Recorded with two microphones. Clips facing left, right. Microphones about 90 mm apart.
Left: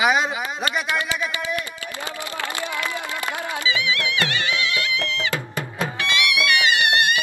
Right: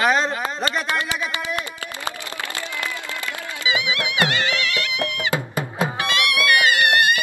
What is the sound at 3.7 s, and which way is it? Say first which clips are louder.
Music: right 1 dB; 20° right (ahead or behind).